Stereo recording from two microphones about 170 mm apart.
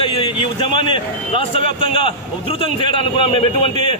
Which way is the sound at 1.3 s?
30° left (ahead or behind).